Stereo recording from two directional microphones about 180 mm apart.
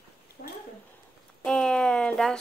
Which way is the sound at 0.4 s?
50° left (ahead or behind).